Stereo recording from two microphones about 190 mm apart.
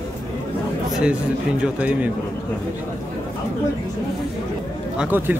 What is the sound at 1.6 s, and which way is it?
Speech, 5° right (ahead or behind).